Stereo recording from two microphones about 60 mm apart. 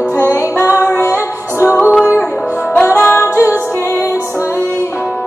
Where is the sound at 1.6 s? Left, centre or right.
Left.